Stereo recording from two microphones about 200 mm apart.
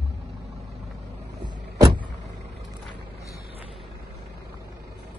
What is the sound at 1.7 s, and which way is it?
Vehicle, 20° right (ahead or behind).